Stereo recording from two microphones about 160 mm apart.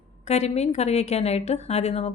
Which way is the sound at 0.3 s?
45° left (ahead or behind).